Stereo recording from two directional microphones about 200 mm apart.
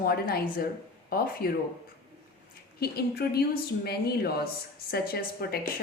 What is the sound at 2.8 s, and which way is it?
A woman's voice, 50° left (ahead or behind).